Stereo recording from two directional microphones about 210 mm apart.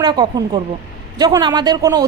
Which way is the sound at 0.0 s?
20° right (ahead or behind).